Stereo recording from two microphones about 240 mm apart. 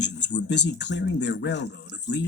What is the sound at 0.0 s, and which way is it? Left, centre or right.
Speech, left.